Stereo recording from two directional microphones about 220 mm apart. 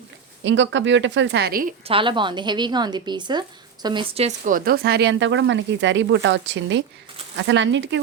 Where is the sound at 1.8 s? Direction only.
25° right (ahead or behind).